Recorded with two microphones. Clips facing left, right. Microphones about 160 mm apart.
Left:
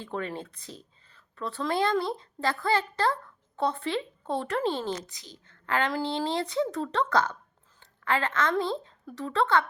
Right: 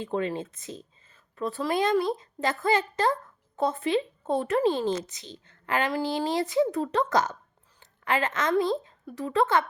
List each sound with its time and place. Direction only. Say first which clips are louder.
0.0 s speech: right 5 dB; 20° right (ahead or behind)
5.6 s speech: right 1 dB; 10° right (ahead or behind)
8.0 s speech: right 1 dB; 15° right (ahead or behind)